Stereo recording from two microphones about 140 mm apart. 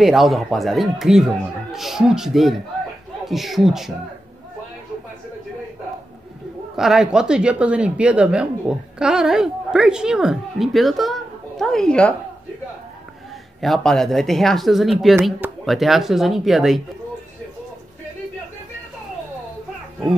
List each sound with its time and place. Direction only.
0.0 s speech: centre (ahead or behind)
6.8 s speech: 5° right (ahead or behind)
13.6 s speech: centre (ahead or behind)